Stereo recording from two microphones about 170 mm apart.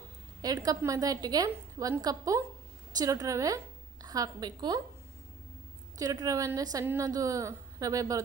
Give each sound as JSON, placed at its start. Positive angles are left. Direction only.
{"t": 0.4, "sound": "a woman's voice", "side_deg": -20}
{"t": 6.0, "sound": "a woman's voice", "side_deg": -20}